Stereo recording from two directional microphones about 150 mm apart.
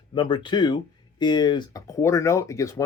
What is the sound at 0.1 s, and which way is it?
Speech, 30° left (ahead or behind).